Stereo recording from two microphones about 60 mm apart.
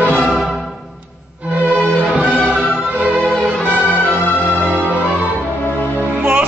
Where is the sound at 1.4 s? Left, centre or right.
Right.